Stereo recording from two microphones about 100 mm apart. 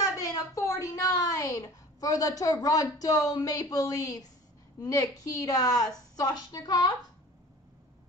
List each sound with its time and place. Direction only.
0.6 s a woman's voice: 35° left (ahead or behind)